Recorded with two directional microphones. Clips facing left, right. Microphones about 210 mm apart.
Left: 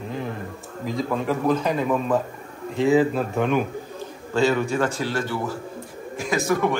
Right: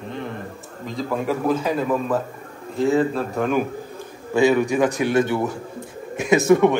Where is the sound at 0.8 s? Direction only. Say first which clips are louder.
Even; centre (ahead or behind).